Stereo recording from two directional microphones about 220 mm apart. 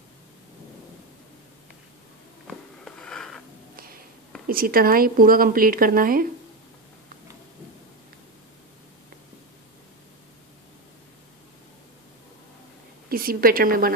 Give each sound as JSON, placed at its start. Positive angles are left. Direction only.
{"t": 2.4, "sound": "a sound", "side_deg": 5}
{"t": 4.5, "sound": "speech", "side_deg": -40}
{"t": 13.1, "sound": "speech", "side_deg": -40}